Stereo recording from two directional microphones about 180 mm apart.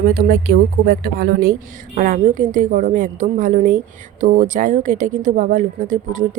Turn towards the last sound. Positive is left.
turn(degrees=-45)  # may be behind; listen again after turning